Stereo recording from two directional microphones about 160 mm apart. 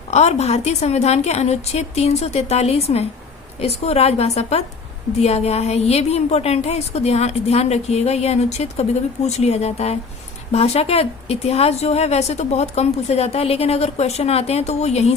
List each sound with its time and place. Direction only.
0.1 s a woman's voice: 45° left (ahead or behind)